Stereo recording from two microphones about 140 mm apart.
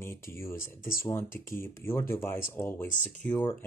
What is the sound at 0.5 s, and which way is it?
Speech, 75° left (ahead or behind).